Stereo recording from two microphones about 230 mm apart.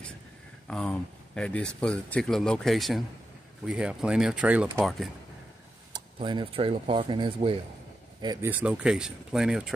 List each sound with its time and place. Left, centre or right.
0.7 s speech: centre
5.9 s speech: centre
8.5 s speech: centre